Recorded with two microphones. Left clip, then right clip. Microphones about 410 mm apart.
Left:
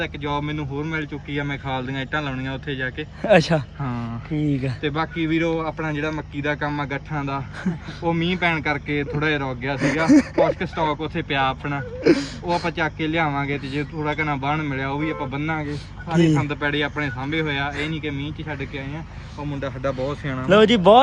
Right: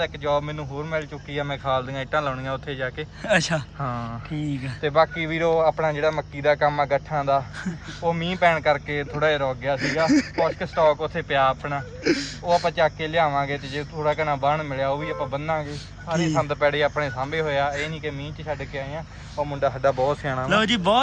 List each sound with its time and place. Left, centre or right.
0.0 s speech: centre
17.7 s speech: right
19.8 s speech: centre
20.5 s speech: centre